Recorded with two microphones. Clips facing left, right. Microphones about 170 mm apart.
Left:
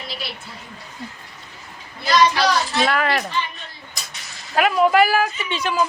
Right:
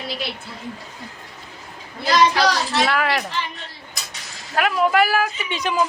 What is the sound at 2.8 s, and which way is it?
Speech, 5° right (ahead or behind).